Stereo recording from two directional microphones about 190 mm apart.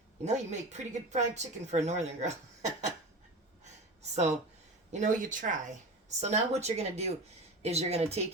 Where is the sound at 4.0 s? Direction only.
35° right (ahead or behind).